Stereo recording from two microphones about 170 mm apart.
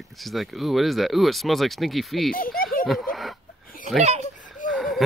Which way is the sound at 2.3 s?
60° left (ahead or behind).